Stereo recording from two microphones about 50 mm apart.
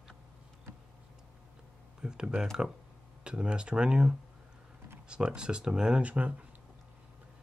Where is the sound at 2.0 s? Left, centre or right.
Centre.